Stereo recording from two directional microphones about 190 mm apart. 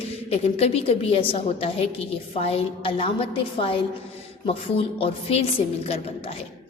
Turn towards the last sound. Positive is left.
turn(degrees=30)  # may be behind; listen again after turning